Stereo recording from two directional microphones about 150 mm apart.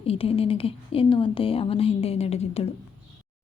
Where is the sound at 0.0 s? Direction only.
40° left (ahead or behind).